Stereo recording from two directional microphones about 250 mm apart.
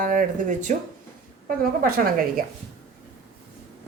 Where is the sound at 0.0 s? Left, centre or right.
Right.